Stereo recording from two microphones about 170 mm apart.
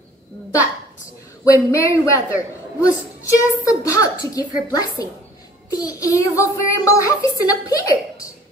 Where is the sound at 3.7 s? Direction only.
20° left (ahead or behind).